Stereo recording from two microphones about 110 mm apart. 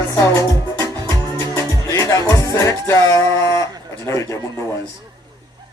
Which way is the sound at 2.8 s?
30° left (ahead or behind).